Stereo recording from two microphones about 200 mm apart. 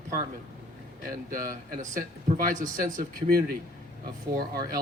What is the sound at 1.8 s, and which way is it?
Speech, 40° right (ahead or behind).